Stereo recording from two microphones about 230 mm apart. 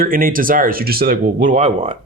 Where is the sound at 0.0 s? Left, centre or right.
Right.